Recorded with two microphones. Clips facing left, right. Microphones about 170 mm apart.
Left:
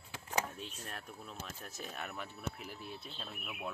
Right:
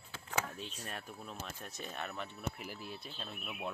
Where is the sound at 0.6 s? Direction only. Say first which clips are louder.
Right 2 dB; centre (ahead or behind).